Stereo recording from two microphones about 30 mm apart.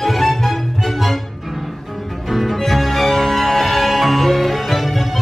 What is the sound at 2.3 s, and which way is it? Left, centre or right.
Music, centre.